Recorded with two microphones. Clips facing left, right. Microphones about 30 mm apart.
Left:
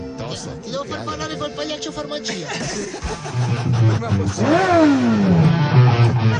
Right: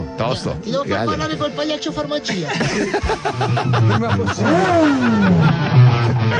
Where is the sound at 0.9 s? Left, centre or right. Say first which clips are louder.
Right 7 dB; right.